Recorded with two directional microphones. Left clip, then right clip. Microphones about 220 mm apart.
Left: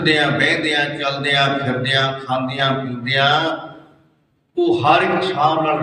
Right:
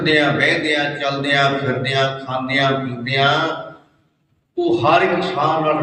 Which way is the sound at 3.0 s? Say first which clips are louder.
Left 1 dB; 25° left (ahead or behind).